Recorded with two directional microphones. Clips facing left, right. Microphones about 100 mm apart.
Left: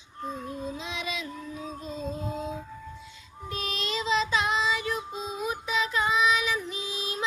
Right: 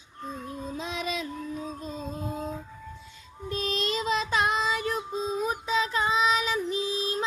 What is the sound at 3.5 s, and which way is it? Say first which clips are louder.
Child singing: right 4 dB; 40° right (ahead or behind).